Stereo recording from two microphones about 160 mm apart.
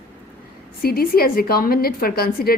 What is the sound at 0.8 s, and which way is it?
A woman's voice, 70° left (ahead or behind).